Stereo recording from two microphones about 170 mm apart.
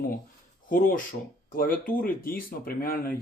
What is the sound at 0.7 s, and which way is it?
Speech, 55° left (ahead or behind).